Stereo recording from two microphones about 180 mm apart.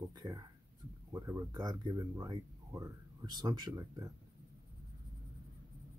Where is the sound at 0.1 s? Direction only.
20° right (ahead or behind).